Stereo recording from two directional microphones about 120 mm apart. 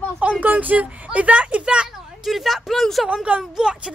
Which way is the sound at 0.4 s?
15° right (ahead or behind).